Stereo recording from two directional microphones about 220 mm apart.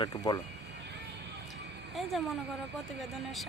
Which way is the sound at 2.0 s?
Centre (ahead or behind).